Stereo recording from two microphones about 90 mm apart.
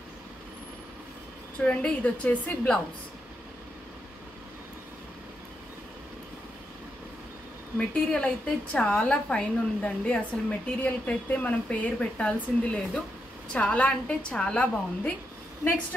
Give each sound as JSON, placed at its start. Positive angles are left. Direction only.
{"t": 1.7, "sound": "speech", "side_deg": 15}
{"t": 7.7, "sound": "speech", "side_deg": 10}